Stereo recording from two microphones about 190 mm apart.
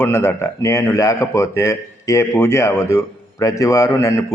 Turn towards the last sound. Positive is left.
turn(degrees=15)  # may be behind; listen again after turning